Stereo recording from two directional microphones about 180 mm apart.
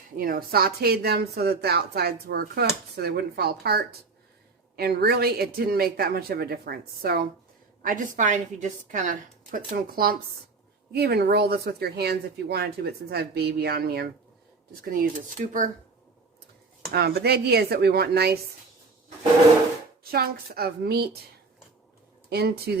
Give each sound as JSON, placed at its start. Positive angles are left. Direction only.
{"t": 0.2, "sound": "a woman's voice", "side_deg": -55}
{"t": 15.4, "sound": "a woman's voice", "side_deg": -45}
{"t": 16.9, "sound": "a woman's voice", "side_deg": -60}
{"t": 20.1, "sound": "a woman's voice", "side_deg": -55}
{"t": 22.3, "sound": "a woman's voice", "side_deg": -60}